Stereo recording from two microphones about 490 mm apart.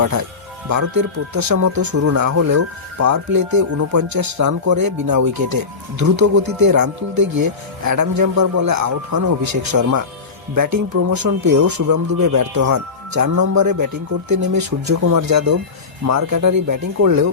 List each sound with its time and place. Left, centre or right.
0.7 s speech: right